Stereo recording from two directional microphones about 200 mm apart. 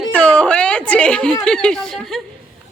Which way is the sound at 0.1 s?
5° left (ahead or behind).